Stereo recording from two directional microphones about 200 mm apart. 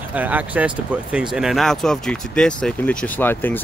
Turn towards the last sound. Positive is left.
turn(degrees=10)  # may be behind; listen again after turning